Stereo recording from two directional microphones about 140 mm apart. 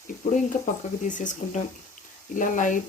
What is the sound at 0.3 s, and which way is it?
Speech, 65° left (ahead or behind).